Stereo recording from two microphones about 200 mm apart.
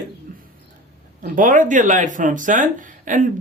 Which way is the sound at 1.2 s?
40° right (ahead or behind).